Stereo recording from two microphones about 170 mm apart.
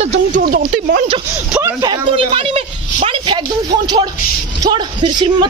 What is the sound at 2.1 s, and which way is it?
Speech, 35° right (ahead or behind).